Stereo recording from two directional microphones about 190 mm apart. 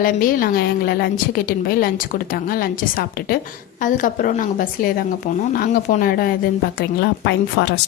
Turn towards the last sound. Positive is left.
turn(degrees=60)  # may be behind; listen again after turning